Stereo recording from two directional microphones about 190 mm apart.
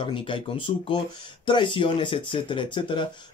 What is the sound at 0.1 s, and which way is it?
Speech, 25° left (ahead or behind).